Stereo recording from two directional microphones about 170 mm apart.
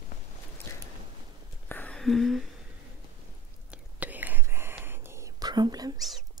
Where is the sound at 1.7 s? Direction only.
10° left (ahead or behind).